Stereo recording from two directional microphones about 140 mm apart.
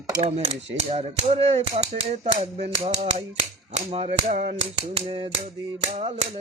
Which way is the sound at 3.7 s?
45° right (ahead or behind).